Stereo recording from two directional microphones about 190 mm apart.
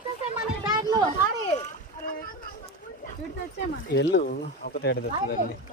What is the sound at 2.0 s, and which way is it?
Speech, 50° left (ahead or behind).